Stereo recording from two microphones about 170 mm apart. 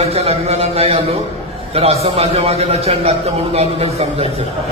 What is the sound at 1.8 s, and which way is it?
A man's voice, 35° right (ahead or behind).